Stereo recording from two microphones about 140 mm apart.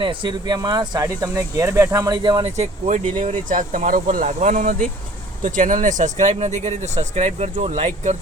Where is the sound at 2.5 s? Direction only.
55° right (ahead or behind).